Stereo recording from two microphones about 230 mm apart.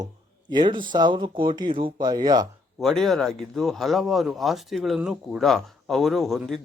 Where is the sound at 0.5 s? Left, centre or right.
Centre.